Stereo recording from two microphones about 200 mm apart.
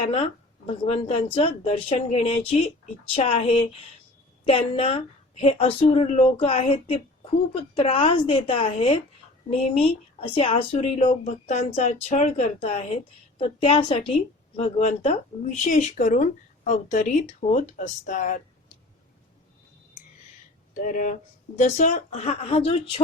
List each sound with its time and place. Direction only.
0.0 s a woman's voice: 30° left (ahead or behind)
20.8 s speech: 40° left (ahead or behind)